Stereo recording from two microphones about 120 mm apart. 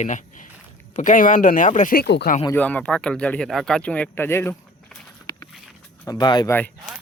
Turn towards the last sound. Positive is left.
turn(degrees=15)  # may be behind; listen again after turning